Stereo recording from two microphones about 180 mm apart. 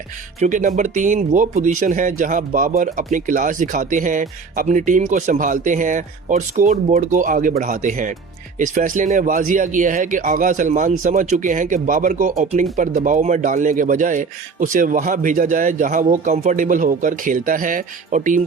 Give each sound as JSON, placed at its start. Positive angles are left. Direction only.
{"t": 0.3, "sound": "speech", "side_deg": -45}